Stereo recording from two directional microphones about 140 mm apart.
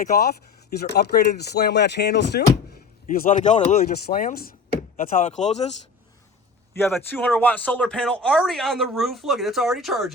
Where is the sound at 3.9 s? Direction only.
85° left.